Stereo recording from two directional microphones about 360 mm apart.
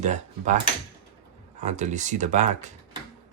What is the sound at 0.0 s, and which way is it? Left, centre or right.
Speech, centre.